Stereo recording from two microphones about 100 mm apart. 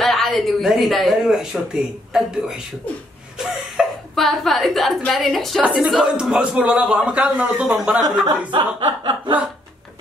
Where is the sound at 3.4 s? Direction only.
5° right (ahead or behind).